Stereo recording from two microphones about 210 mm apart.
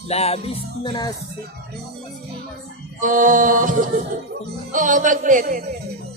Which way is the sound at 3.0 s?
40° right (ahead or behind).